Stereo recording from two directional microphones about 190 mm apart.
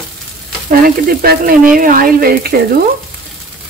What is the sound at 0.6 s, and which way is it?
Speech, 50° right (ahead or behind).